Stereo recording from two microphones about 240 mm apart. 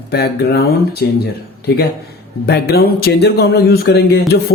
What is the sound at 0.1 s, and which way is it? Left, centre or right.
Speech, left.